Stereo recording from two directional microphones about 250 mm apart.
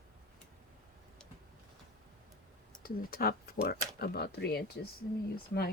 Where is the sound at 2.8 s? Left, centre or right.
Left.